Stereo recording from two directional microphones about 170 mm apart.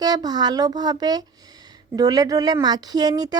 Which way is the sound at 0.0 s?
25° right (ahead or behind).